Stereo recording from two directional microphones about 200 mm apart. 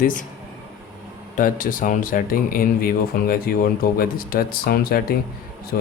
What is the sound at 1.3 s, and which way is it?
Speech, 40° left (ahead or behind).